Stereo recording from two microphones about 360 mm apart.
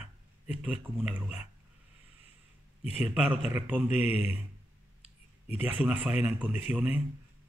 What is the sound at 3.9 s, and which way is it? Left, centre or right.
Speech, centre.